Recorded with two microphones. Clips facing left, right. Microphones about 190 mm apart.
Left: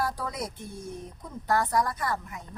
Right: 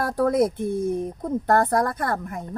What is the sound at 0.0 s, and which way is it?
A woman's voice, 55° right (ahead or behind).